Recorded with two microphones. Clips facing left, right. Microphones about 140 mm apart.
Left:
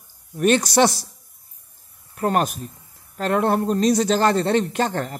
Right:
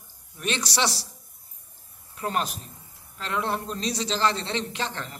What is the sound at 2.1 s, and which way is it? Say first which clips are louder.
Speech: left 8 dB; 55° left (ahead or behind).